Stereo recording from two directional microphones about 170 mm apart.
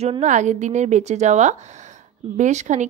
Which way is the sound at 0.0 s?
40° right (ahead or behind).